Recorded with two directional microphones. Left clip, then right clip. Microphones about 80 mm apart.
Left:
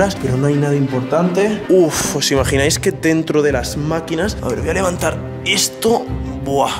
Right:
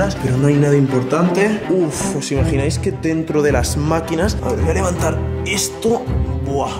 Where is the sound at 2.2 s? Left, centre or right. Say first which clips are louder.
Left 7 dB; left.